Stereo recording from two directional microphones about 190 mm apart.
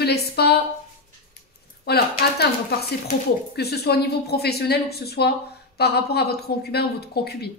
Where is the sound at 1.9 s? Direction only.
55° left (ahead or behind).